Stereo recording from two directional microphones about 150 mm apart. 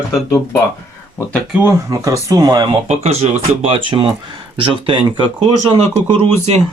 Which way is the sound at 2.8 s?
45° right (ahead or behind).